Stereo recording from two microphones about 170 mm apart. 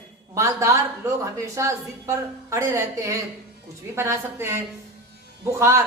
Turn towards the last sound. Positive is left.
turn(degrees=-15)  # may be behind; listen again after turning